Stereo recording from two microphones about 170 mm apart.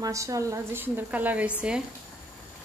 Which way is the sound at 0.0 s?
20° right (ahead or behind).